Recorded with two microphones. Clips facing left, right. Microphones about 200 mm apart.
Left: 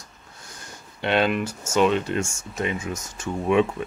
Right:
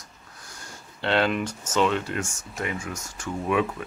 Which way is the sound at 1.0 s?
15° left (ahead or behind).